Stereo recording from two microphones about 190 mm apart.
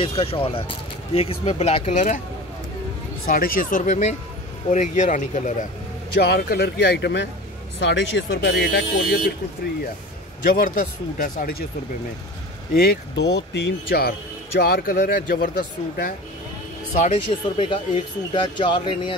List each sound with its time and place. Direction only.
0.0 s speech: 30° left (ahead or behind)
3.3 s speech: 50° left (ahead or behind)
6.1 s speech: 55° left (ahead or behind)
10.4 s speech: 50° left (ahead or behind)
12.7 s speech: 55° left (ahead or behind)
16.9 s speech: 35° left (ahead or behind)
18.3 s speech: 25° left (ahead or behind)